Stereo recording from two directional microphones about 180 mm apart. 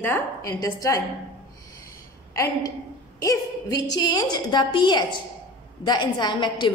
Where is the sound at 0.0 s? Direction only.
15° left (ahead or behind).